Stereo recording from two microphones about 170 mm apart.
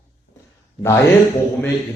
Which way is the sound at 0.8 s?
15° left (ahead or behind).